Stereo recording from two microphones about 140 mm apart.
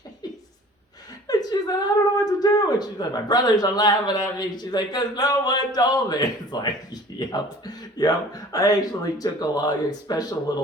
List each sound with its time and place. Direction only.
1.3 s chuckle: 30° left (ahead or behind)
2.1 s speech: 25° left (ahead or behind)